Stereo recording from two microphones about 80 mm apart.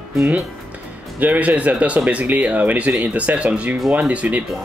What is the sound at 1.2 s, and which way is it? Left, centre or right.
Speech, right.